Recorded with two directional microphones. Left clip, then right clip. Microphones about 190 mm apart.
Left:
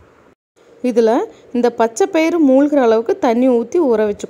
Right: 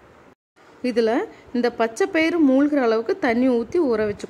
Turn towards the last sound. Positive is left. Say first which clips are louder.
# left 6 dB
turn(degrees=20)  # may be behind; listen again after turning